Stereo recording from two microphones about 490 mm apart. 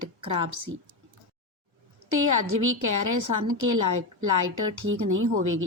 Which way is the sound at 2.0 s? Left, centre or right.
Right.